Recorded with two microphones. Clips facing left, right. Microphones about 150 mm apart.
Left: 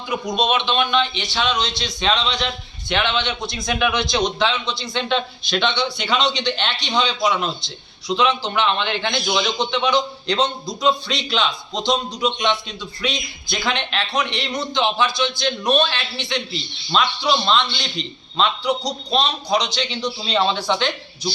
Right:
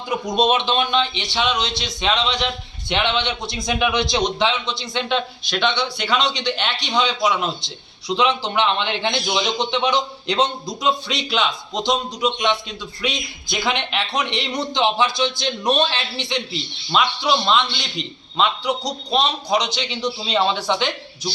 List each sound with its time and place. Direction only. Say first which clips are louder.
0.4 s a man's voice: even; 40° right (ahead or behind); by 7.5 s 10° right (ahead or behind)
8.0 s a man's voice: even; 25° right (ahead or behind)
16.9 s a man's voice: even; 5° right (ahead or behind)